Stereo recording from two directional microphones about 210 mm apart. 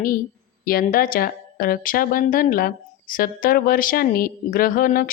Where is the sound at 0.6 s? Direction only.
45° left (ahead or behind).